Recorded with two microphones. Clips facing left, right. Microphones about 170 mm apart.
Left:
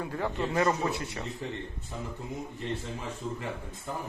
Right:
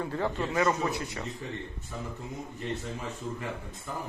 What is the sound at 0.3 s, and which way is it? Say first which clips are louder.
Speech: left 1 dB; 25° left (ahead or behind).